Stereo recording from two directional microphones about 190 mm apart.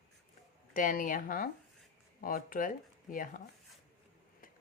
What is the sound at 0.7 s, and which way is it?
A woman's voice, 45° left (ahead or behind).